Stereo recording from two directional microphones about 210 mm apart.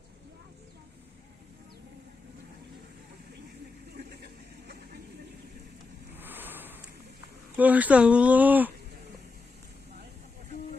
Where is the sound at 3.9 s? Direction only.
50° right (ahead or behind).